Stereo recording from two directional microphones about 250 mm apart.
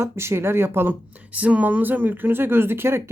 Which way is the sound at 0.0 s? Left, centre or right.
Centre.